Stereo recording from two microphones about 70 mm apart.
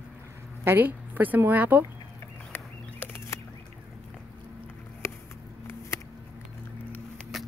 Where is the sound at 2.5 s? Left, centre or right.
Left.